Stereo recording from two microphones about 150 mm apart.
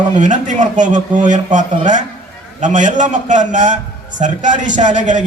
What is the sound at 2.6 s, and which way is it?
A man's voice, 55° right (ahead or behind).